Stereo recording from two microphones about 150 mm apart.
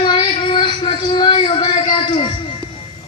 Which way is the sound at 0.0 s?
35° left (ahead or behind).